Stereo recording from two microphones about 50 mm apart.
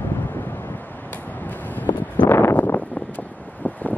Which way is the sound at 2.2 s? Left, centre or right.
Left.